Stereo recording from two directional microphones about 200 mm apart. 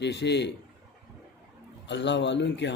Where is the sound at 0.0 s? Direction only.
60° left (ahead or behind).